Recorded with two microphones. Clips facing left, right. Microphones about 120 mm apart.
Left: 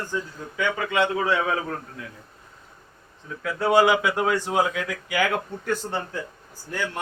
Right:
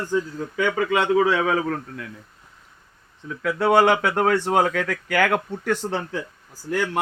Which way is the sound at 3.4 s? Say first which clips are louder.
Right 2 dB; 65° right (ahead or behind).